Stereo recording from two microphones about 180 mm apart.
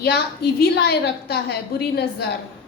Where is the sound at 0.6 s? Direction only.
60° left (ahead or behind).